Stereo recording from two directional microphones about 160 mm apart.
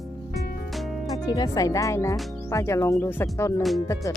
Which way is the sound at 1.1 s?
25° left (ahead or behind).